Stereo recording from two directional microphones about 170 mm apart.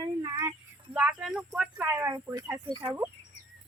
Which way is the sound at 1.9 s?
15° right (ahead or behind).